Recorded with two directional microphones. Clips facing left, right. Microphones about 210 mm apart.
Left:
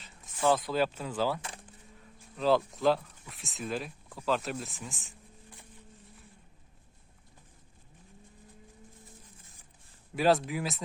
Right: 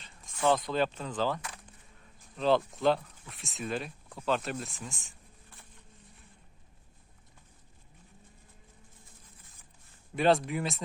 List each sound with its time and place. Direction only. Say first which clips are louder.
0.4 s speech: even; 5° left (ahead or behind)
10.2 s speech: even; centre (ahead or behind)